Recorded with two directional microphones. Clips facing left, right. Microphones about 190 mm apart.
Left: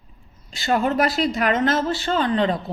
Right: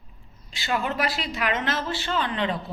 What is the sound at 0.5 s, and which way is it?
Speech, 45° left (ahead or behind).